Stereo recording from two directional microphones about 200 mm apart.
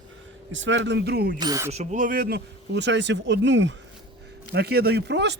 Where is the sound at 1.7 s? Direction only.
35° right (ahead or behind); by 3.7 s 65° right (ahead or behind).